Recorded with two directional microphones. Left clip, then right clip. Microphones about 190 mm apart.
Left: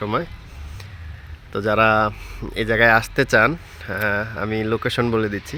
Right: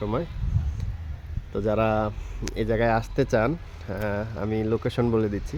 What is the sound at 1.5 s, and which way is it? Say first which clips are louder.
Speech: left 7 dB; 5° right (ahead or behind).